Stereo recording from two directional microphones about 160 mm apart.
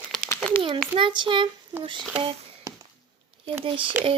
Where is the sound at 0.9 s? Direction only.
30° right (ahead or behind).